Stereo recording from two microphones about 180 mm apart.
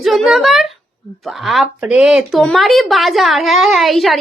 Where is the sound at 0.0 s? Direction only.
Centre (ahead or behind).